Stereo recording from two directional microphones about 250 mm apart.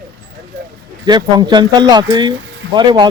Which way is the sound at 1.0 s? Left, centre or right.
Centre.